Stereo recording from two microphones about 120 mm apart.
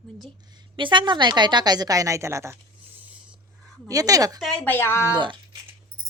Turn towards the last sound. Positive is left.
turn(degrees=20)  # may be behind; listen again after turning